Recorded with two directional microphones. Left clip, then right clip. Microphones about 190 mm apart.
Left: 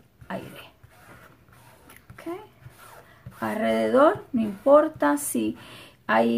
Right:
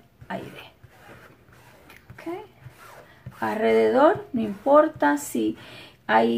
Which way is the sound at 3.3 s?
35° left (ahead or behind).